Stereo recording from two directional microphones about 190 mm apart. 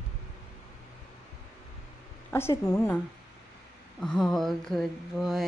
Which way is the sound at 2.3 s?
15° left (ahead or behind).